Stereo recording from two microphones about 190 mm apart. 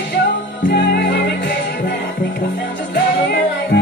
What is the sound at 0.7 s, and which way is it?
Music, 65° left (ahead or behind).